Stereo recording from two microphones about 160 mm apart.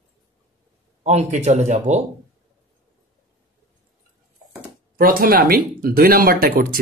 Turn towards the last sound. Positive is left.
turn(degrees=-65)  # may be behind; listen again after turning